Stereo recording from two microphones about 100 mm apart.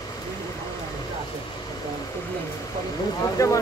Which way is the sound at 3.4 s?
30° left (ahead or behind).